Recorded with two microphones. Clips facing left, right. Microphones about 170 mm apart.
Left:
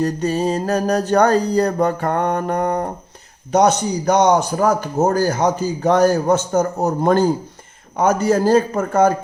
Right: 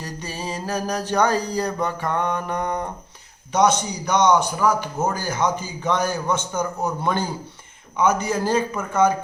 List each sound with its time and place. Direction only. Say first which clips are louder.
0.3 s mantra: left 5 dB; 40° left (ahead or behind)
3.6 s a man's voice: left 3 dB; 40° left (ahead or behind)